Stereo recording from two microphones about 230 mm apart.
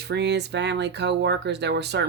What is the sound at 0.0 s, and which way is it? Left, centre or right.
Speech, right.